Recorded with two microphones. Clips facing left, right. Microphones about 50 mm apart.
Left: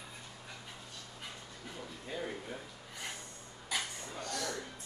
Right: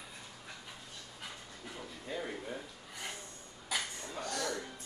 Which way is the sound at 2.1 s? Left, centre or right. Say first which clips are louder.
Right 1 dB; centre.